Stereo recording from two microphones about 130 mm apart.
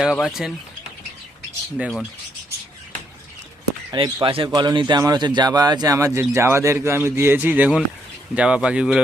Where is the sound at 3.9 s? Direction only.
35° right (ahead or behind).